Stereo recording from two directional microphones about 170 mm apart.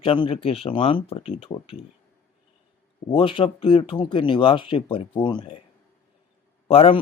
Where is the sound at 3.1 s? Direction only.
30° left (ahead or behind).